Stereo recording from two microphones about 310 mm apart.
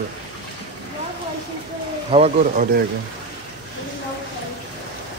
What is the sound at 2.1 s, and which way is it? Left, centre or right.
Speech, right.